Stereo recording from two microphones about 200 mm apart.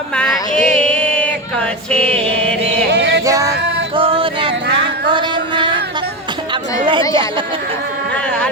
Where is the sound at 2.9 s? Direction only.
60° right (ahead or behind).